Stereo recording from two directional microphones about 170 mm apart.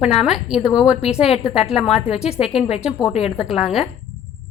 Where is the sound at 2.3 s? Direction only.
40° left (ahead or behind).